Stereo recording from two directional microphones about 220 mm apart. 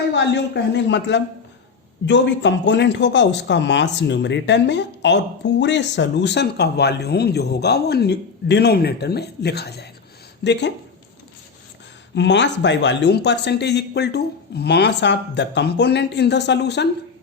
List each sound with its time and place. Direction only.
0.1 s speech: 50° left (ahead or behind)
12.1 s speech: 50° left (ahead or behind)